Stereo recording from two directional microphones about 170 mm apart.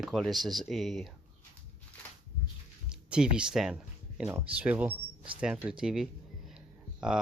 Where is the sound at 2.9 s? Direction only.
5° right (ahead or behind).